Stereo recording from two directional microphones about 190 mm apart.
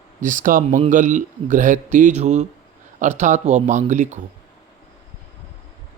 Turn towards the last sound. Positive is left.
turn(degrees=-40)  # may be behind; listen again after turning